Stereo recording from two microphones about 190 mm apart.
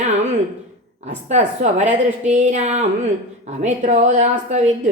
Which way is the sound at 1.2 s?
40° right (ahead or behind).